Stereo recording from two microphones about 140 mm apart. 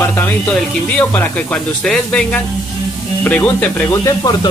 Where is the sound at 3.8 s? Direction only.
25° left (ahead or behind).